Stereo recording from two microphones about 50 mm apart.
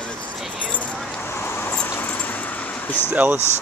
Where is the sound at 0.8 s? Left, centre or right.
Centre.